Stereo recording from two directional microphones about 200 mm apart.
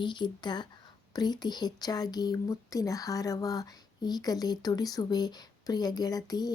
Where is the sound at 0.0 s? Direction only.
25° left (ahead or behind).